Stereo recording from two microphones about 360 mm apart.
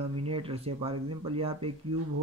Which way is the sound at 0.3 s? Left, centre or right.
Centre.